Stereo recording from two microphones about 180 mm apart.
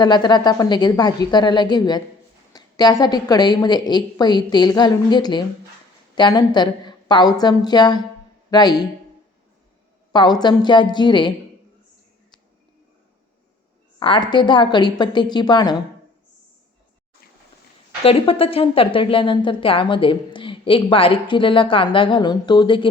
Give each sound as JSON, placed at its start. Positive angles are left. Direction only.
{"t": 0.0, "sound": "speech", "side_deg": 25}
{"t": 10.1, "sound": "speech", "side_deg": 25}
{"t": 14.0, "sound": "speech", "side_deg": 25}
{"t": 18.0, "sound": "speech", "side_deg": 30}